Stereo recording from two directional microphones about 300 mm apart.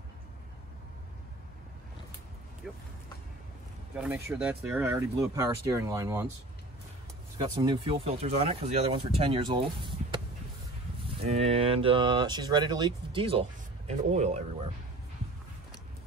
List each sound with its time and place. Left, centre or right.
2.6 s speech: centre
3.9 s speech: centre
7.3 s speech: centre
11.2 s speech: centre